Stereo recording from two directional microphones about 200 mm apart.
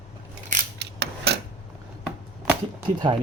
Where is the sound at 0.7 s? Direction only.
55° right (ahead or behind).